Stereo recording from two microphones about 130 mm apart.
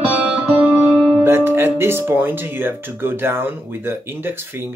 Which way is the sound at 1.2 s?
20° right (ahead or behind).